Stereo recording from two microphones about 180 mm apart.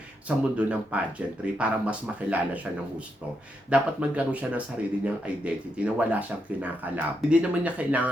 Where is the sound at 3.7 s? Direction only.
5° right (ahead or behind).